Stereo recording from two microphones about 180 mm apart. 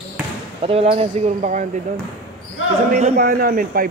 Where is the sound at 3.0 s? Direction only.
50° right (ahead or behind).